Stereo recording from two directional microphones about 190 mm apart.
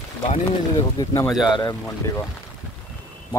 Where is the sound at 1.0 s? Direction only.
15° left (ahead or behind).